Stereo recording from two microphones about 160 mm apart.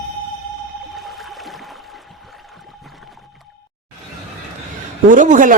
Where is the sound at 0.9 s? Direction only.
Centre (ahead or behind).